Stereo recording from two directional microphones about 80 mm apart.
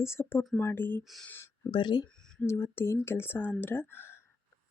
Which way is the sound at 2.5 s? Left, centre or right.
Left.